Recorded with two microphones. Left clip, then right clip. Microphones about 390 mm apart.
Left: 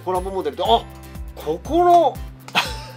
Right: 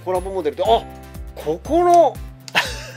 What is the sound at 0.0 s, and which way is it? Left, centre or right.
Speech, right.